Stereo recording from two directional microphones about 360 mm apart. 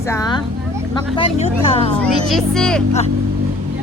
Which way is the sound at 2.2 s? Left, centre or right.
Centre.